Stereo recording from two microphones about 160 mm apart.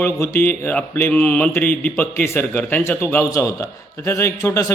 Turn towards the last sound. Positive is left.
turn(degrees=20)  # may be behind; listen again after turning